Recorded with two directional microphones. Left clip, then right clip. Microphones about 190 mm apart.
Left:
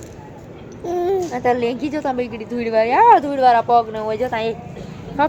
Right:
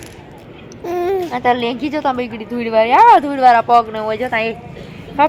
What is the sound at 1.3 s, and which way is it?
A woman's voice, 15° right (ahead or behind).